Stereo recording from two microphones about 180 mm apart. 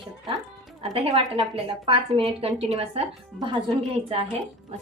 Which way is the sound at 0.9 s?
35° right (ahead or behind).